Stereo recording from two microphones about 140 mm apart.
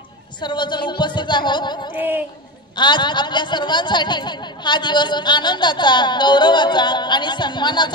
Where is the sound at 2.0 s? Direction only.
15° right (ahead or behind).